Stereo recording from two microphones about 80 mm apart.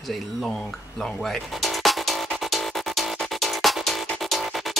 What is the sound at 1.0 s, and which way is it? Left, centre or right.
Music, centre.